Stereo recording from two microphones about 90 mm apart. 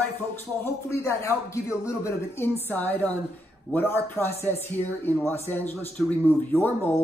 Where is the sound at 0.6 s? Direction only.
35° left (ahead or behind).